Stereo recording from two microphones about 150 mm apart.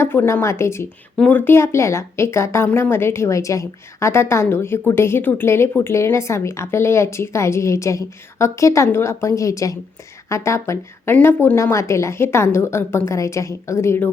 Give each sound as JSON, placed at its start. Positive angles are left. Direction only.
{"t": 0.0, "sound": "a woman's voice", "side_deg": 15}